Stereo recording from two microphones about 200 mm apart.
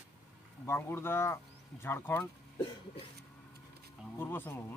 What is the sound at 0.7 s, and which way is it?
Speech, 10° left (ahead or behind).